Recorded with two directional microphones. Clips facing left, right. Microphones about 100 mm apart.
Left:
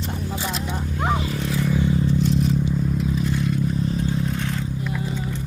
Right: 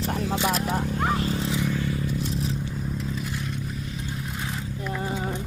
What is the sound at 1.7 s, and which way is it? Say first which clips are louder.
Scrape: left 7 dB; 20° left (ahead or behind).